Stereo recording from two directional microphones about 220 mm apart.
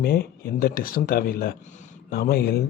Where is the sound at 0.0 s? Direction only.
45° left (ahead or behind).